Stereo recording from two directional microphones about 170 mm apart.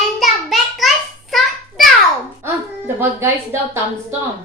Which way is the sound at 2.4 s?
15° right (ahead or behind).